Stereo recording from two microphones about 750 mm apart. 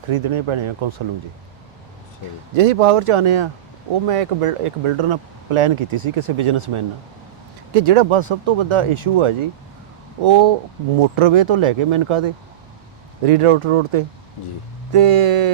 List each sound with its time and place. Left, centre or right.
0.1 s speech: right
2.6 s speech: right